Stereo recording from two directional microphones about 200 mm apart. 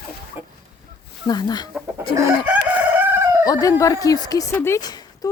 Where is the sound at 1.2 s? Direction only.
20° left (ahead or behind).